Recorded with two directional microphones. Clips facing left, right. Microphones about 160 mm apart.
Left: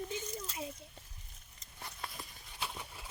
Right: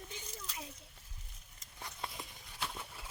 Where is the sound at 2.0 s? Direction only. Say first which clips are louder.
Right 2 dB; 20° right (ahead or behind).